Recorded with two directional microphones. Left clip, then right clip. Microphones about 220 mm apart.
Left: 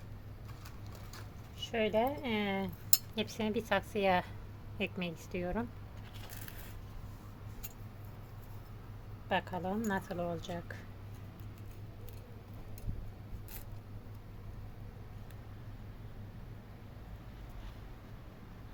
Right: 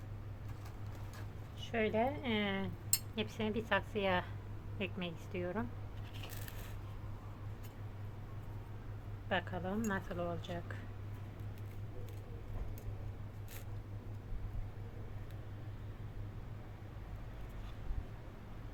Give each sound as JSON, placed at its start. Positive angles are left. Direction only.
{"t": 1.5, "sound": "speech", "side_deg": 30}
{"t": 9.3, "sound": "speech", "side_deg": 30}